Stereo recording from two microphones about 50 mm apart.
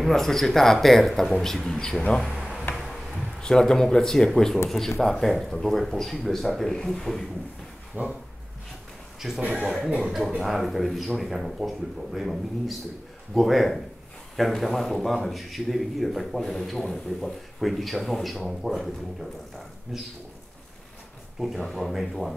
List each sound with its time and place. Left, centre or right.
0.0 s a man's voice: centre
2.7 s a sound: centre
3.3 s a man's voice: centre
7.9 s speech: right
9.2 s a man's voice: centre
9.8 s speech: centre
10.4 s a man's voice: centre
19.9 s speech: centre
21.4 s a man's voice: centre